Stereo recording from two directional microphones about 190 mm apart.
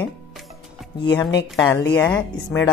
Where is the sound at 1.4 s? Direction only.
15° left (ahead or behind).